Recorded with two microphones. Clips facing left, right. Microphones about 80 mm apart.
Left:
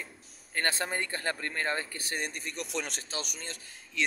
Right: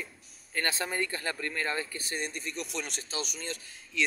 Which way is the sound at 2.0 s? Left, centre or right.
Left.